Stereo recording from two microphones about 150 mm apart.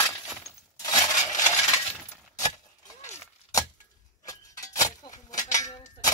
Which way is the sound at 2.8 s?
55° left (ahead or behind).